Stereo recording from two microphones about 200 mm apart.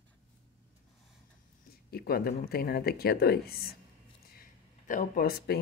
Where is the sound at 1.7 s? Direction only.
50° left (ahead or behind).